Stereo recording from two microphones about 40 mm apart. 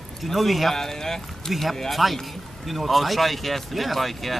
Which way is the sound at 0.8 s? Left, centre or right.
Centre.